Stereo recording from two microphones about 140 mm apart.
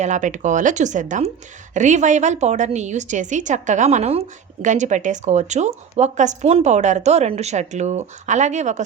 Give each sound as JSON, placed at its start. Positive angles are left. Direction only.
{"t": 0.0, "sound": "speech", "side_deg": -60}
{"t": 4.6, "sound": "speech", "side_deg": -60}